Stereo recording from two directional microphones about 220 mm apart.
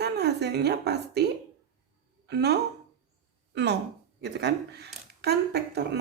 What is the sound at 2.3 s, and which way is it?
Speech, 50° right (ahead or behind).